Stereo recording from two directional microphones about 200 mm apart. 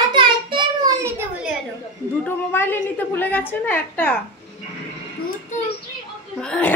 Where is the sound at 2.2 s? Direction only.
10° left (ahead or behind).